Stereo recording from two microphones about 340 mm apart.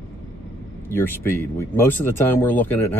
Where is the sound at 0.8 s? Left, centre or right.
Centre.